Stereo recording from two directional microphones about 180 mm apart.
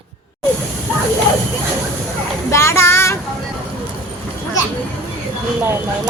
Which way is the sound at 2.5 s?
15° left (ahead or behind).